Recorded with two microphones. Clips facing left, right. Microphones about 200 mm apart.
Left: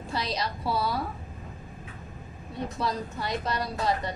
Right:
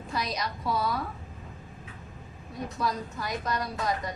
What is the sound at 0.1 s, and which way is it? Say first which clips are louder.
Speech: left 1 dB; 30° left (ahead or behind).